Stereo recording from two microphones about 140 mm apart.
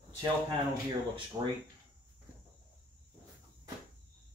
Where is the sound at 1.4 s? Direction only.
30° right (ahead or behind).